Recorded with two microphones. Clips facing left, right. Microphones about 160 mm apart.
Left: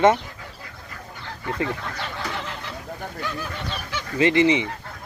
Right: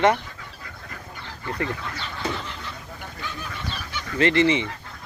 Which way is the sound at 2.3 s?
70° left (ahead or behind).